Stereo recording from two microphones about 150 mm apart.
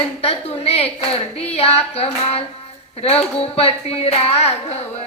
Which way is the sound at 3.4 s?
40° left (ahead or behind).